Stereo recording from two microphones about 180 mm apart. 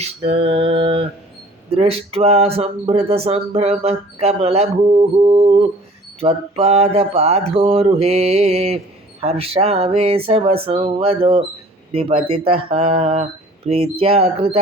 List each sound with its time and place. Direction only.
0.0 s speech: 35° right (ahead or behind)